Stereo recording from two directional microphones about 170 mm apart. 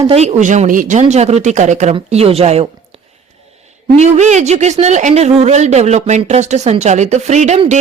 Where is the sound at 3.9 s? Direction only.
45° right (ahead or behind).